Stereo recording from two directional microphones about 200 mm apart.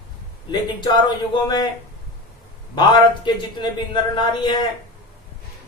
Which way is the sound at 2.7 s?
20° left (ahead or behind).